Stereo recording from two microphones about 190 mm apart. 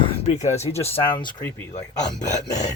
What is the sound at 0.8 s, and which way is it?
Speech, 25° left (ahead or behind).